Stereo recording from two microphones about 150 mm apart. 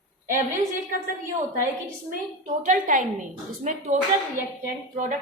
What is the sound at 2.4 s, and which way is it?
A woman's voice, 60° right (ahead or behind).